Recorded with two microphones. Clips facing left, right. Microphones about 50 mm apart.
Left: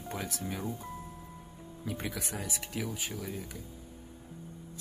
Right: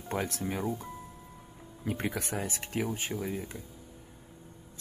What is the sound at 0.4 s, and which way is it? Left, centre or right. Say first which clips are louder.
Speech: right 4 dB; centre.